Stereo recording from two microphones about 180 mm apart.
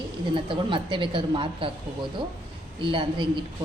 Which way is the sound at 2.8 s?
30° right (ahead or behind).